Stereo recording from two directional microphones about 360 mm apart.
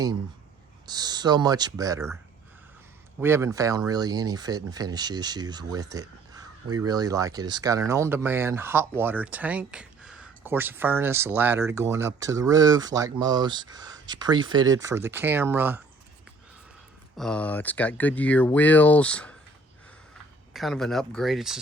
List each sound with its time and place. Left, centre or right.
0.9 s speech: centre
3.2 s speech: centre
17.2 s speech: centre
20.5 s speech: centre